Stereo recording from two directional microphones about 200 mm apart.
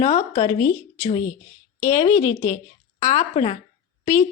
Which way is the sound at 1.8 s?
35° left (ahead or behind).